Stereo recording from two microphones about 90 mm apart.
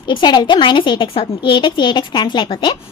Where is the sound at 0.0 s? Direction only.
60° left (ahead or behind).